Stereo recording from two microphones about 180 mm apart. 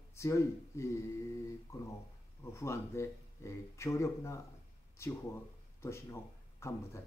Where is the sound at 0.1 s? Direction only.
15° left (ahead or behind).